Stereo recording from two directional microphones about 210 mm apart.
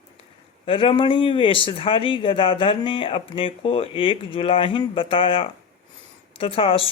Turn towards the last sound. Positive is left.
turn(degrees=25)  # may be behind; listen again after turning